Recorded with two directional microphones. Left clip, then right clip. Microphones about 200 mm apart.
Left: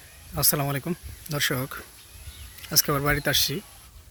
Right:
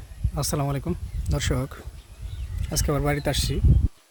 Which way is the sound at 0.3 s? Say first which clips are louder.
Left 1 dB; 5° right (ahead or behind).